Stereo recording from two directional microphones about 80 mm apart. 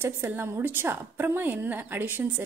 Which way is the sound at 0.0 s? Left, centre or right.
Right.